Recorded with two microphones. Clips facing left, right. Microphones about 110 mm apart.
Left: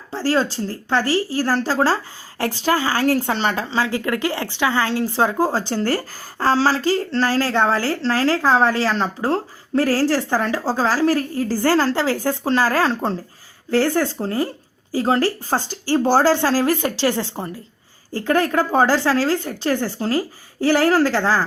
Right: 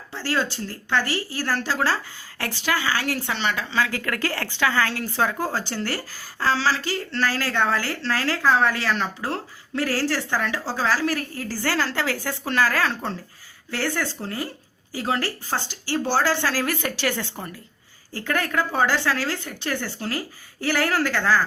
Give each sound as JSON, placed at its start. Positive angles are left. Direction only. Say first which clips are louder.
{"t": 0.1, "sound": "a woman's voice", "louder": "left 6 dB", "side_deg": 35}